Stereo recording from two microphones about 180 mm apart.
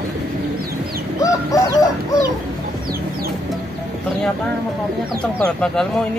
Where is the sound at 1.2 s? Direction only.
20° left (ahead or behind).